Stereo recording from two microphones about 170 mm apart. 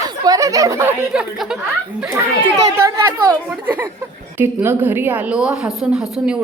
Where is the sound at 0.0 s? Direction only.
20° right (ahead or behind).